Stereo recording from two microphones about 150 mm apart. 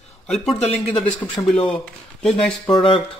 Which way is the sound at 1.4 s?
25° left (ahead or behind).